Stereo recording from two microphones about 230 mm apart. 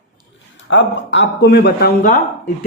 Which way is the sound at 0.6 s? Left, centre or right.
Left.